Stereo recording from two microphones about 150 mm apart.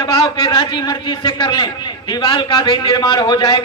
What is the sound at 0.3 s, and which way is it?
A man's voice, 30° left (ahead or behind).